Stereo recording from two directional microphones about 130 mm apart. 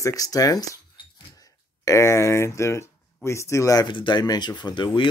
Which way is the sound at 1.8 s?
25° left (ahead or behind).